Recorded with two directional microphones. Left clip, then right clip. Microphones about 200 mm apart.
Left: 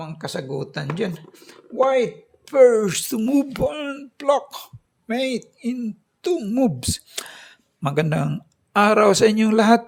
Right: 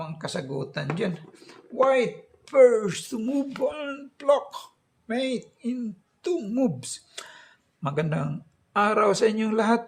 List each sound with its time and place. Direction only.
0.0 s speech: 40° left (ahead or behind)